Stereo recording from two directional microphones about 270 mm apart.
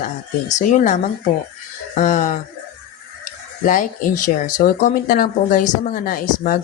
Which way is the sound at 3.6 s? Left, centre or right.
Left.